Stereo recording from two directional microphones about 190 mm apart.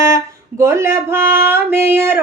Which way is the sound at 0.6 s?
15° right (ahead or behind).